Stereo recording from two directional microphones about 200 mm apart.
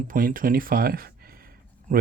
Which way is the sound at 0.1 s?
40° right (ahead or behind).